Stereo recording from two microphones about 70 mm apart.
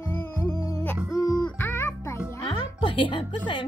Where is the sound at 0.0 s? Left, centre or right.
Left.